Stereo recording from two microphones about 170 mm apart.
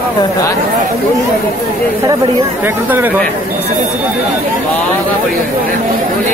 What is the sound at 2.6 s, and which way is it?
Speech, 10° right (ahead or behind).